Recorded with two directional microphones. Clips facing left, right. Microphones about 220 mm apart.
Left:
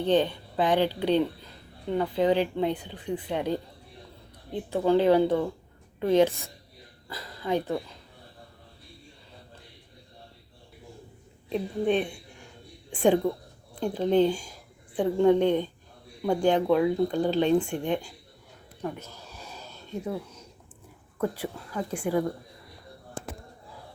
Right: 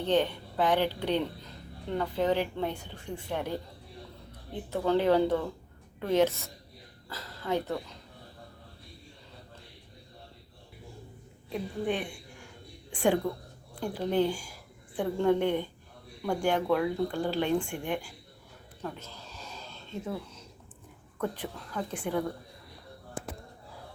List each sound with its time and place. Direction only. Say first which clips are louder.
0.0 s speech: left 3 dB; 15° left (ahead or behind)
4.7 s speech: left 4 dB; 15° left (ahead or behind)
11.4 s a woman's voice: left 5 dB; 20° left (ahead or behind)
18.8 s a sound: left 5 dB; 15° left (ahead or behind)
21.2 s speech: left 4 dB; 10° left (ahead or behind)